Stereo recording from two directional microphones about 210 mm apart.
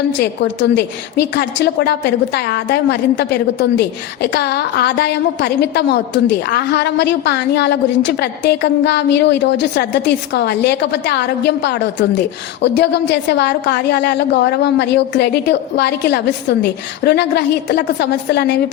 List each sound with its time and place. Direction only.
0.1 s a woman's voice: 60° left (ahead or behind)